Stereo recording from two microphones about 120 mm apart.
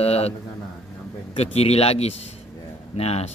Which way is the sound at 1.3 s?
60° left (ahead or behind).